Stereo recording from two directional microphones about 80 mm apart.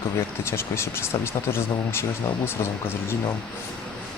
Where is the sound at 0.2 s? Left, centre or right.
Left.